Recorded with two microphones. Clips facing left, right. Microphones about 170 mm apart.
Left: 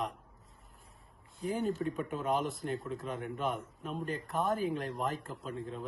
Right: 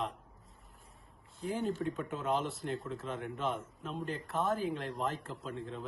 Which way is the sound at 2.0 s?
15° left (ahead or behind).